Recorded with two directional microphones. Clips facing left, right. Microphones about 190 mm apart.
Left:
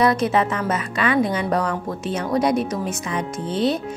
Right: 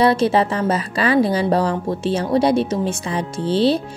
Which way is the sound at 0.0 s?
30° right (ahead or behind).